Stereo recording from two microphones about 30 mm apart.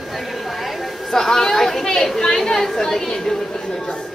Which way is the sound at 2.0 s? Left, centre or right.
Centre.